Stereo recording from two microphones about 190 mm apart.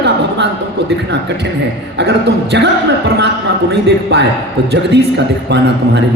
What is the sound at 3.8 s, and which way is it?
Speech, 60° right (ahead or behind).